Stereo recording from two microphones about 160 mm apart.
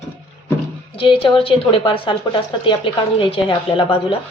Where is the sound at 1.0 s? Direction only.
35° left (ahead or behind).